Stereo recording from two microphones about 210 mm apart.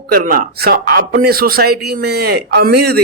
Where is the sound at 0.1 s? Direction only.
45° right (ahead or behind).